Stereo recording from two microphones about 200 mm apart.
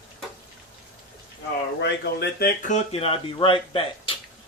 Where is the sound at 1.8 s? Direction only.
55° left (ahead or behind); by 4.1 s 25° left (ahead or behind).